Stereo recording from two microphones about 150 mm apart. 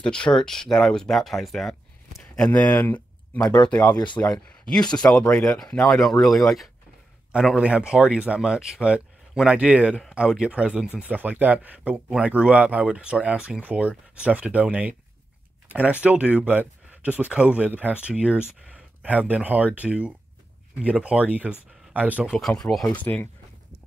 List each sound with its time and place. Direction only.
0.0 s a man's voice: 5° left (ahead or behind)
3.8 s speech: 30° left (ahead or behind)
4.2 s speech: 5° left (ahead or behind)